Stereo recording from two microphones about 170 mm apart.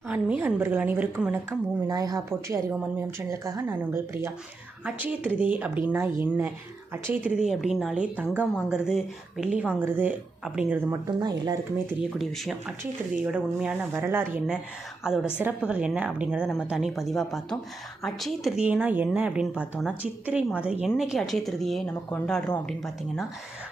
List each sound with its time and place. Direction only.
0.1 s speech: 10° right (ahead or behind)
1.9 s a woman's voice: 20° right (ahead or behind)
11.2 s a woman's voice: 25° right (ahead or behind)
11.9 s a woman's voice: centre (ahead or behind)